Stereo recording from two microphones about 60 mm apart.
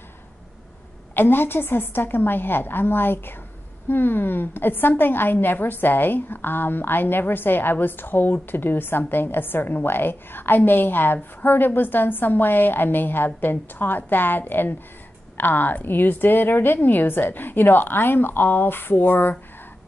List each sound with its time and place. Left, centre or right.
1.1 s a woman's voice: left